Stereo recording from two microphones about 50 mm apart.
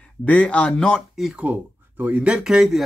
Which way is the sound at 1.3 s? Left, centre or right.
Right.